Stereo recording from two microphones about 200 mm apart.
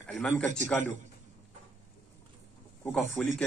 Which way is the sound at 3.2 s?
5° left (ahead or behind).